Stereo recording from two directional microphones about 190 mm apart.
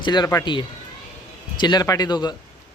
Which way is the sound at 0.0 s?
20° left (ahead or behind).